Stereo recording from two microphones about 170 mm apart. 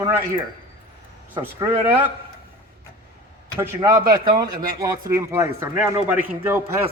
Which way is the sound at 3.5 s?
15° right (ahead or behind).